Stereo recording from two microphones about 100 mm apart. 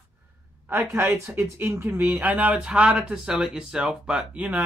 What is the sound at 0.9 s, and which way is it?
Speech, 25° right (ahead or behind).